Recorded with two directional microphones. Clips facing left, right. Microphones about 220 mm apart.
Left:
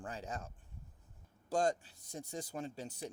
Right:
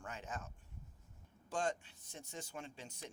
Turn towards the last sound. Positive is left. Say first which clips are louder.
# left 7 dB
turn(degrees=35)  # may be behind; listen again after turning